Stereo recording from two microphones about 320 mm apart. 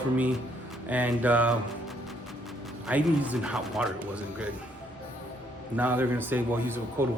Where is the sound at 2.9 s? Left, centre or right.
Centre.